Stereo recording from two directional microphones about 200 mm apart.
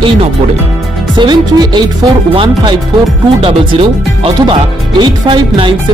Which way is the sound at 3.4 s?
25° right (ahead or behind).